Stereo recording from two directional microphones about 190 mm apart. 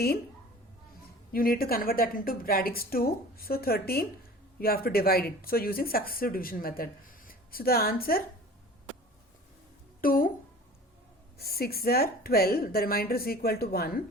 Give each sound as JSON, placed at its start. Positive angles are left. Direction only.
{"t": 1.3, "sound": "speech", "side_deg": 50}
{"t": 10.0, "sound": "speech", "side_deg": 50}
{"t": 11.3, "sound": "speech", "side_deg": 55}